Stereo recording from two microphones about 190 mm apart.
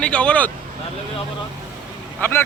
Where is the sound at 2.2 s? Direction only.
10° left (ahead or behind).